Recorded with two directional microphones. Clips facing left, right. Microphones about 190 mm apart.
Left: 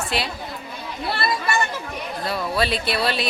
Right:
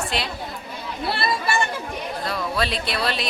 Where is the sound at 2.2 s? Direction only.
5° left (ahead or behind).